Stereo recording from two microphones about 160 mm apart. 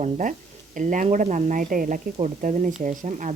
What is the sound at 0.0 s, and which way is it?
Speech, 55° right (ahead or behind).